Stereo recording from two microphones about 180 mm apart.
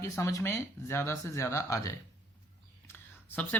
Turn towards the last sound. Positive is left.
turn(degrees=10)  # may be behind; listen again after turning